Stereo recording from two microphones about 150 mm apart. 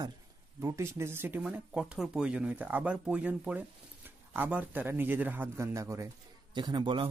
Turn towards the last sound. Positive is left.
turn(degrees=-30)  # may be behind; listen again after turning